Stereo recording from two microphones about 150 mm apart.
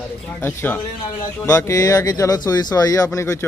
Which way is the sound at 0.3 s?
15° left (ahead or behind).